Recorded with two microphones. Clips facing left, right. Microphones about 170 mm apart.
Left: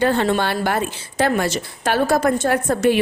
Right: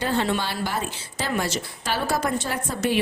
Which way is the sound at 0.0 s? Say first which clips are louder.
Left 6 dB; 55° left (ahead or behind).